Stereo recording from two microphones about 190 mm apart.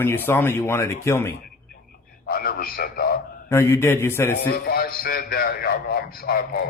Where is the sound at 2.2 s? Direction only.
50° left (ahead or behind).